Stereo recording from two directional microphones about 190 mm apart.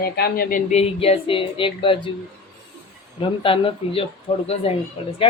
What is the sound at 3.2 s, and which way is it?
Speech, 25° left (ahead or behind).